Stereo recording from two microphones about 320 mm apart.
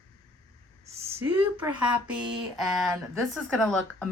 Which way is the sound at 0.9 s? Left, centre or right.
Centre.